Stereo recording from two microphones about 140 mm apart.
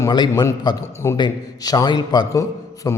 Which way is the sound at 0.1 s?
30° left (ahead or behind).